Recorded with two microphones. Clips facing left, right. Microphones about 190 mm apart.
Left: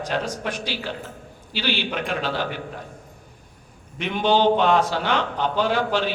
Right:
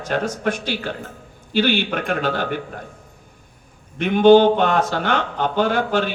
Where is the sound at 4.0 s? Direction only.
50° right (ahead or behind).